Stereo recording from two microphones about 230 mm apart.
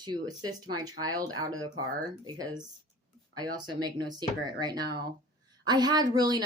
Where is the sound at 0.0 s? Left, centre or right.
Centre.